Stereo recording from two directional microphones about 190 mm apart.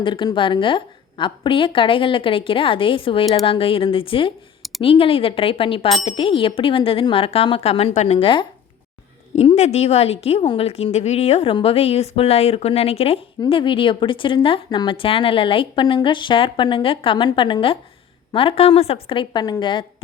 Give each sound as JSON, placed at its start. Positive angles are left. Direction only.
{"t": 0.0, "sound": "a woman's voice", "side_deg": 25}